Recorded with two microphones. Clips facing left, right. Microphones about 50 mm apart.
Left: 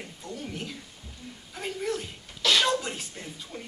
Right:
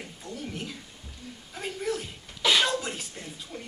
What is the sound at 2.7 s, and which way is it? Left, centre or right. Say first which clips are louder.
Speech: left 2 dB; centre.